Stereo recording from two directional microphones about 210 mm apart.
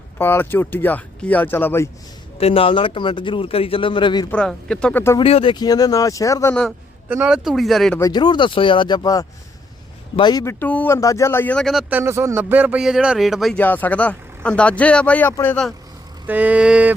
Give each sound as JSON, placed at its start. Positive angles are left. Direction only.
{"t": 0.2, "sound": "speech", "side_deg": 10}
{"t": 2.4, "sound": "a man's voice", "side_deg": 25}
{"t": 4.3, "sound": "speech", "side_deg": 5}
{"t": 5.2, "sound": "speech", "side_deg": 25}
{"t": 7.1, "sound": "speech", "side_deg": -5}
{"t": 7.9, "sound": "a man's voice", "side_deg": 20}
{"t": 16.2, "sound": "a sound", "side_deg": -5}